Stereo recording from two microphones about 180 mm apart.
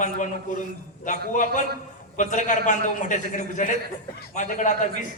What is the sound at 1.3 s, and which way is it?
A man's voice, 45° left (ahead or behind).